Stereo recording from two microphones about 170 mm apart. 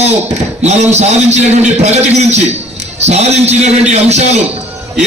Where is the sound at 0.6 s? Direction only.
40° right (ahead or behind).